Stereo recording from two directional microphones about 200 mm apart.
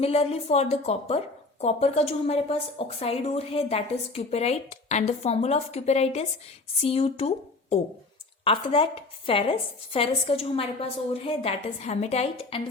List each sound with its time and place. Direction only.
0.0 s a woman's voice: 30° left (ahead or behind)